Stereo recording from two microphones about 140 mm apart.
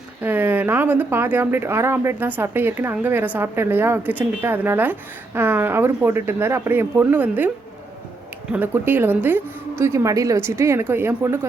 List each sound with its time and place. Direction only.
0.2 s speech: 15° right (ahead or behind)
8.5 s speech: 15° right (ahead or behind)